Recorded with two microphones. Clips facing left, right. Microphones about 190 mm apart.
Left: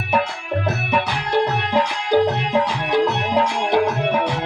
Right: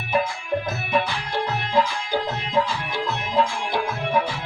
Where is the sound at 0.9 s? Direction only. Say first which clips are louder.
Left 3 dB; 70° left (ahead or behind).